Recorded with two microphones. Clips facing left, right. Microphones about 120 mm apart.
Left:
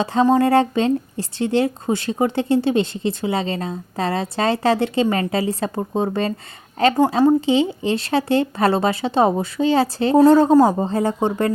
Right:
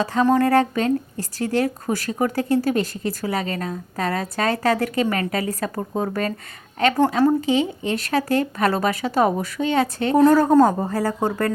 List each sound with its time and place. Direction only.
0.0 s a woman's voice: 30° left (ahead or behind)